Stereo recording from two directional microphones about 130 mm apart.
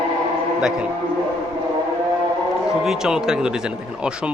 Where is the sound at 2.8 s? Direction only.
5° right (ahead or behind).